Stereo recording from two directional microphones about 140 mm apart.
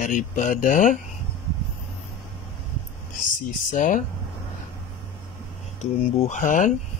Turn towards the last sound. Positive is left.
turn(degrees=70)  # may be behind; listen again after turning